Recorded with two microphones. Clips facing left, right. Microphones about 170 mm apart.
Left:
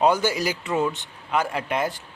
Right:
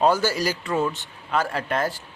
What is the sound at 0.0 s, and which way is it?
A man's voice, 15° left (ahead or behind).